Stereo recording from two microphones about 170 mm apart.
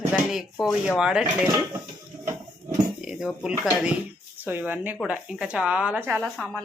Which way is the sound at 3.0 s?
5° right (ahead or behind).